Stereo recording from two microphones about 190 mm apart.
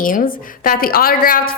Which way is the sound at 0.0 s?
45° left (ahead or behind).